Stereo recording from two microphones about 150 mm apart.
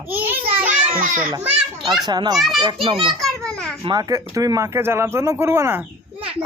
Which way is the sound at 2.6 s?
35° right (ahead or behind).